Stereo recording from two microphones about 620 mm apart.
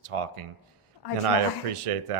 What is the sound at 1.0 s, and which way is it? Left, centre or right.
Speech, left.